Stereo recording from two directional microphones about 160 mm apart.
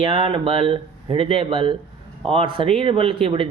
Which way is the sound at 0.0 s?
30° right (ahead or behind).